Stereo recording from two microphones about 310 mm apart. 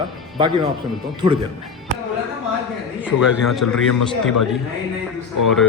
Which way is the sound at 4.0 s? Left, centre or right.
Left.